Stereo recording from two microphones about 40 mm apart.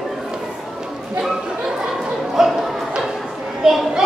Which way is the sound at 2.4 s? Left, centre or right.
Centre.